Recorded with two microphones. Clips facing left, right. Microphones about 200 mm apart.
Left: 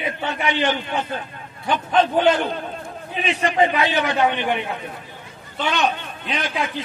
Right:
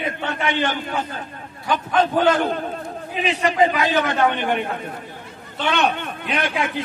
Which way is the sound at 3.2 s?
35° right (ahead or behind).